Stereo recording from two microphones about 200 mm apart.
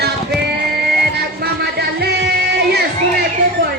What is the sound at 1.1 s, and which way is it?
Music, 55° right (ahead or behind).